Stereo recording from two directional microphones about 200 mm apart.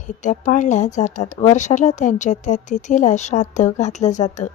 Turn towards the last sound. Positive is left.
turn(degrees=35)  # may be behind; listen again after turning